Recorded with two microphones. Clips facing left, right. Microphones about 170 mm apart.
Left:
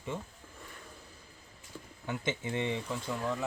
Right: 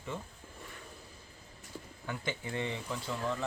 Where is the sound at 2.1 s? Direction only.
20° left (ahead or behind).